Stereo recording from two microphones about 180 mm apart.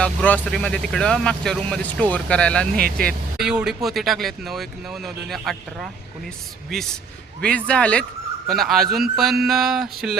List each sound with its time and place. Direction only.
0.0 s speech: 5° left (ahead or behind)
2.7 s speech: 55° right (ahead or behind)
3.3 s speech: 5° right (ahead or behind)